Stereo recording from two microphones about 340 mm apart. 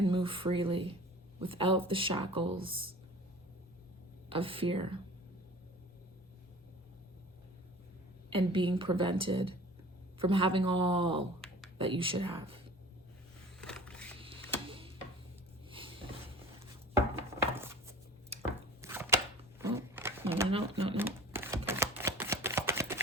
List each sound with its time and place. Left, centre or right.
0.0 s speech: centre
4.3 s speech: centre
8.3 s speech: centre
11.3 s a sound: centre
11.8 s speech: centre
13.6 s a sound: centre
14.2 s mechanisms: centre
15.7 s a sound: centre
16.9 s chopping: centre
18.8 s a sound: centre
20.9 s crumpling: centre
21.7 s shuffling cards: centre